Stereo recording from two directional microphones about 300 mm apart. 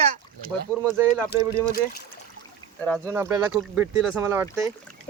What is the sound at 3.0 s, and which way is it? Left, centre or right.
Speech, centre.